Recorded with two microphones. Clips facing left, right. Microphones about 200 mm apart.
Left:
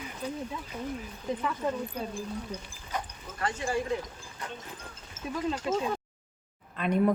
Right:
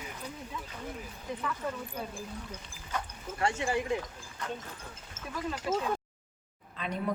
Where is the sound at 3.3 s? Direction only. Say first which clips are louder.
Even; 25° right (ahead or behind).